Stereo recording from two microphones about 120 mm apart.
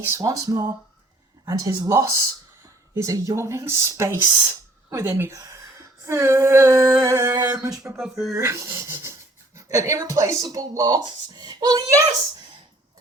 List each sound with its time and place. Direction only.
0.0 s a sound: 25° right (ahead or behind)
7.9 s speech: 5° right (ahead or behind)
8.4 s speech: 25° right (ahead or behind)